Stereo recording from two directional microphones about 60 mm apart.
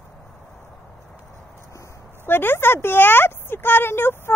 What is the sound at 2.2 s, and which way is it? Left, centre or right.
Speech, left.